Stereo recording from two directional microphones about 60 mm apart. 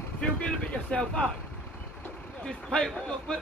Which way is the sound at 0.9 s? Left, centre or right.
Centre.